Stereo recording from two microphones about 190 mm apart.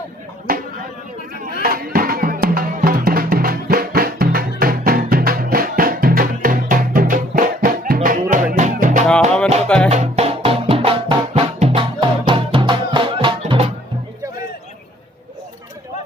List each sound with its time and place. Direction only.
0.5 s a sound: 50° right (ahead or behind)
1.6 s music: 50° right (ahead or behind)
9.6 s music: 5° left (ahead or behind)
9.9 s music: 35° right (ahead or behind)